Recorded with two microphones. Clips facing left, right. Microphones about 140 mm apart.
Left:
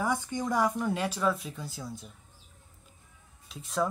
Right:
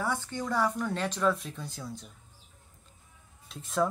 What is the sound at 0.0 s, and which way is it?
Speech, 15° left (ahead or behind).